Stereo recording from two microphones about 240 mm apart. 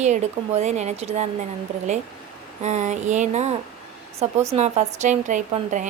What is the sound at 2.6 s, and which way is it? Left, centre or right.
A woman's voice, right.